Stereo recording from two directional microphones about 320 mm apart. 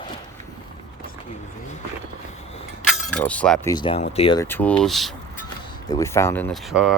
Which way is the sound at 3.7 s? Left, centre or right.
Centre.